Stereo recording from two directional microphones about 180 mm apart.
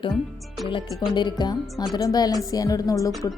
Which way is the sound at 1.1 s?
25° left (ahead or behind).